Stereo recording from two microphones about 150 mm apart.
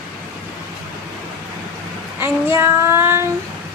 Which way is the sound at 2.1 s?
15° right (ahead or behind).